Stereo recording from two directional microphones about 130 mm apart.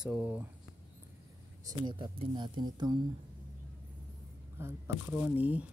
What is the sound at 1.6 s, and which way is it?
Speech, 30° right (ahead or behind).